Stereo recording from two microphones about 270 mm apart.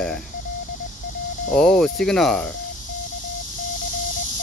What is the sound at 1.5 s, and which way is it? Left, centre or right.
Speech, centre.